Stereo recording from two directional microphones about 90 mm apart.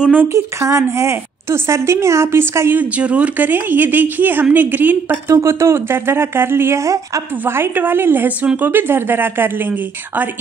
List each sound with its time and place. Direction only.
0.0 s speech: 15° right (ahead or behind)
0.3 s a woman's voice: 35° right (ahead or behind)
2.8 s speech: 15° right (ahead or behind)
5.3 s a woman's voice: 35° right (ahead or behind)